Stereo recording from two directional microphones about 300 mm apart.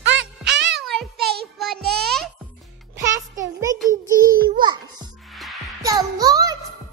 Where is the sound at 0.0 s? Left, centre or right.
Right.